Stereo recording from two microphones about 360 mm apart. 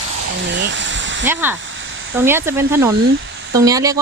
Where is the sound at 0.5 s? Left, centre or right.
Right.